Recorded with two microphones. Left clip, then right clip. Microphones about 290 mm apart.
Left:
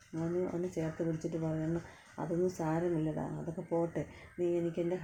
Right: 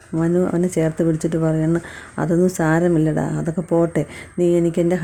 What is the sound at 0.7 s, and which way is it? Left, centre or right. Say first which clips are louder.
Speech: right 17 dB; right.